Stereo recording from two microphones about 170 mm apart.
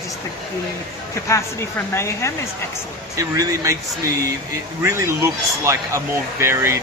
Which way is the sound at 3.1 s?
20° right (ahead or behind).